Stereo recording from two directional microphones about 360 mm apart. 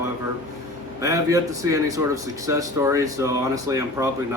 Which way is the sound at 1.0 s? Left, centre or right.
Centre.